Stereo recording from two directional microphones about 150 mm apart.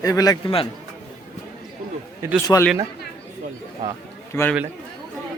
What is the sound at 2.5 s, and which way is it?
Speech, 20° left (ahead or behind).